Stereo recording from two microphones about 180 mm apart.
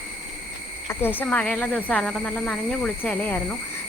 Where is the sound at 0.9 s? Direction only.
10° left (ahead or behind).